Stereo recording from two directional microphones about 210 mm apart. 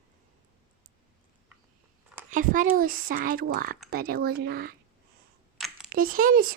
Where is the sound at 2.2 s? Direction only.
40° right (ahead or behind).